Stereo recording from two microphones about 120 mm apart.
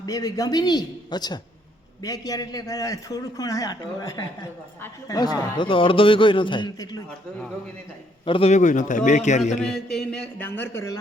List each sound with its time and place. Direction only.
0.0 s a man's voice: 30° left (ahead or behind)
8.2 s a man's voice: 45° left (ahead or behind)
8.4 s a man's voice: 85° left
9.6 s a man's voice: 5° left (ahead or behind); by 10.9 s 20° left (ahead or behind)